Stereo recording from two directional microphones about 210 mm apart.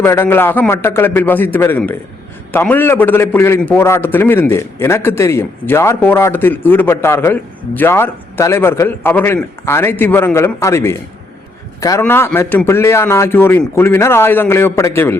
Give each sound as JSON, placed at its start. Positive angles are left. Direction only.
{"t": 0.0, "sound": "a man's voice", "side_deg": 10}